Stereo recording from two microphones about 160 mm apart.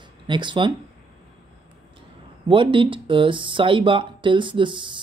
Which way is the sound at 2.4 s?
30° right (ahead or behind).